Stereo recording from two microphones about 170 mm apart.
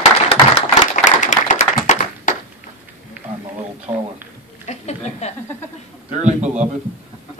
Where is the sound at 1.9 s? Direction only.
50° left (ahead or behind).